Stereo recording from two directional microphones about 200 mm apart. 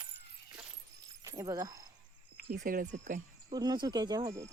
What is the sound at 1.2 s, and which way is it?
Speech, 20° right (ahead or behind).